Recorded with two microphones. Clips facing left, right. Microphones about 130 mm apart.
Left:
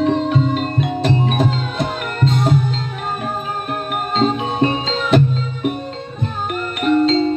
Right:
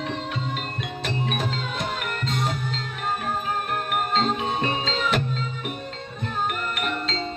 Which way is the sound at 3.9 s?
25° left (ahead or behind).